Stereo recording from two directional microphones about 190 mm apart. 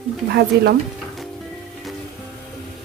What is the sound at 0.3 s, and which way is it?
Speech, 55° right (ahead or behind).